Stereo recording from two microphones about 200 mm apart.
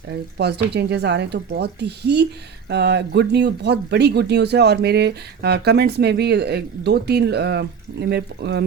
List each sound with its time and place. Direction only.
0.1 s speech: 55° right (ahead or behind)